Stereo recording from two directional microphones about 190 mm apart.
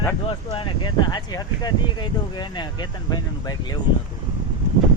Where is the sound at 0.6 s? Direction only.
25° left (ahead or behind).